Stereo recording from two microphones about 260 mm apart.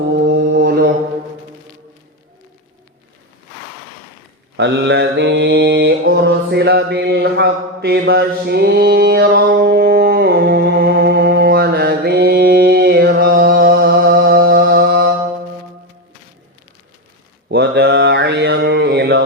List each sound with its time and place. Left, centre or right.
0.2 s mantra: right
4.5 s mantra: right
17.5 s mantra: right